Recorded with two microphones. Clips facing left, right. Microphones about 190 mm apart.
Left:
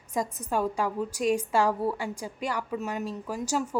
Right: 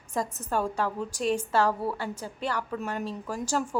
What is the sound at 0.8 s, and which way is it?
A woman's voice, 10° left (ahead or behind).